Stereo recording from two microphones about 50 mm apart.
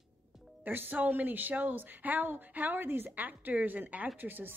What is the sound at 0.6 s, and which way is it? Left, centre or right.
A woman's voice, right.